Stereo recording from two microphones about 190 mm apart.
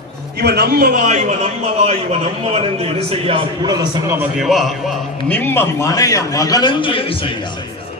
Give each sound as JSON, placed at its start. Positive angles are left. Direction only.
{"t": 0.4, "sound": "a man's voice", "side_deg": -55}
{"t": 4.2, "sound": "a man's voice", "side_deg": 0}
{"t": 5.3, "sound": "a man's voice", "side_deg": 10}